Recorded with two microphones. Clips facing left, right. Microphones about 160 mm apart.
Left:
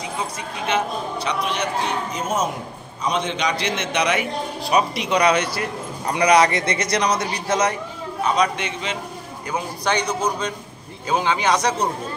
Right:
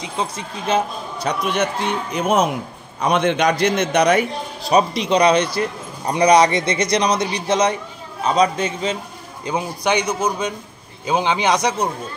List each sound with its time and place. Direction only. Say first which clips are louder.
0.7 s a man's voice: right 3 dB; 35° right (ahead or behind)
1.4 s a man's voice: right 5 dB; 50° right (ahead or behind); by 7.7 s 15° right (ahead or behind)
8.3 s a man's voice: right 4 dB; 35° right (ahead or behind)
9.5 s speech: right 3 dB; 15° right (ahead or behind)